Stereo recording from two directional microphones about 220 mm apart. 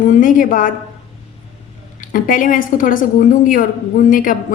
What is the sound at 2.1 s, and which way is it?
Speech, 40° left (ahead or behind).